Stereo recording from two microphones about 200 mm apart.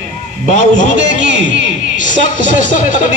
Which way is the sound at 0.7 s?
65° right (ahead or behind).